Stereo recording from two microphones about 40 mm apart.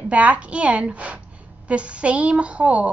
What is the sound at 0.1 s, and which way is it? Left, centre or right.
A woman's voice, right.